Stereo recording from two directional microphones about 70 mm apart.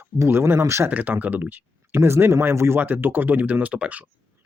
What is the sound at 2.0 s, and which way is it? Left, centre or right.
Speech, right.